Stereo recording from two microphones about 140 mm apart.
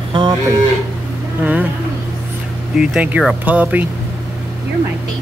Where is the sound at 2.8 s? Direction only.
10° right (ahead or behind).